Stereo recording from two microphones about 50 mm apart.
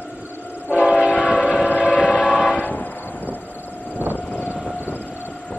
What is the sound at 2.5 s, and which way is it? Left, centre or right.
Train, left.